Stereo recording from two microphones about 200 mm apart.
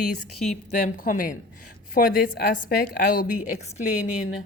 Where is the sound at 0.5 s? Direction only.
40° left (ahead or behind).